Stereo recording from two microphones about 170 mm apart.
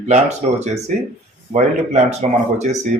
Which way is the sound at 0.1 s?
40° right (ahead or behind).